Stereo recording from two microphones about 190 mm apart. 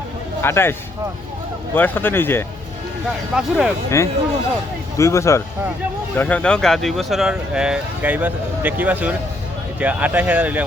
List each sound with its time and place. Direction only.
0.4 s speech: 15° left (ahead or behind)
3.3 s speech: 5° right (ahead or behind)
3.8 s speech: 15° left (ahead or behind); by 10.6 s 10° right (ahead or behind)